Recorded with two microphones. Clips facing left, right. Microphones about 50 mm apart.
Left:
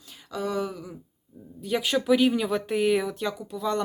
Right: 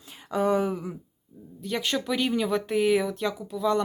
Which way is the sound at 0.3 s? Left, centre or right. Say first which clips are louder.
Right 5 dB; right.